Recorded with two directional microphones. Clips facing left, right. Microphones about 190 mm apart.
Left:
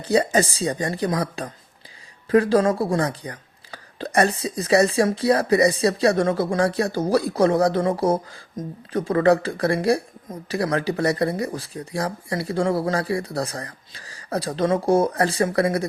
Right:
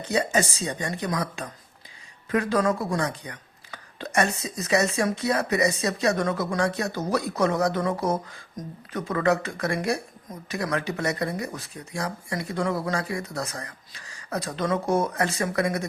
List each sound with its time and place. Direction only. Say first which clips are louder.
0.0 s speech: left 5 dB; 35° left (ahead or behind)